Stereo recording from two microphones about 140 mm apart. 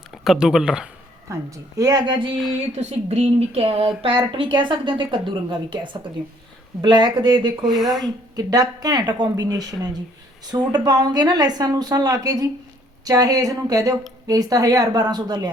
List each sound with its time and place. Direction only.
0.1 s speech: 5° right (ahead or behind)
1.3 s speech: 25° right (ahead or behind)
2.7 s speech: 50° right (ahead or behind); by 7.6 s 30° right (ahead or behind)
7.6 s speech: 5° right (ahead or behind)
8.0 s speech: 25° right (ahead or behind)